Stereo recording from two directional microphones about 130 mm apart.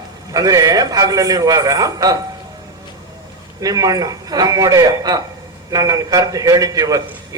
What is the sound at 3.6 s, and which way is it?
A man's voice, 30° right (ahead or behind).